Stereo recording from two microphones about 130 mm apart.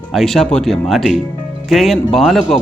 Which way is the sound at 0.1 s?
Centre (ahead or behind).